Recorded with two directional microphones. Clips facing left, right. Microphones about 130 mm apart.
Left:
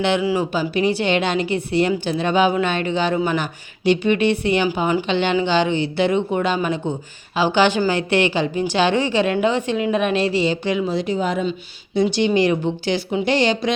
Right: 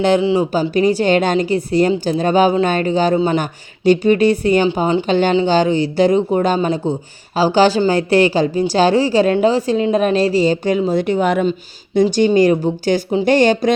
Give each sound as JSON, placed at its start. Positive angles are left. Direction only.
{"t": 0.2, "sound": "speech", "side_deg": -25}
{"t": 0.7, "sound": "a woman's voice", "side_deg": -40}
{"t": 4.8, "sound": "speech", "side_deg": -30}
{"t": 5.0, "sound": "a woman's voice", "side_deg": -40}
{"t": 11.0, "sound": "speech", "side_deg": -65}
{"t": 12.0, "sound": "a woman's voice", "side_deg": -40}